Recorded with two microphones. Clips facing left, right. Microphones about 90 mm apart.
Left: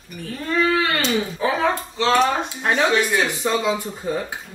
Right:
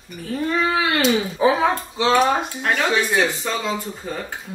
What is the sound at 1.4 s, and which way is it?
Speech, 20° right (ahead or behind).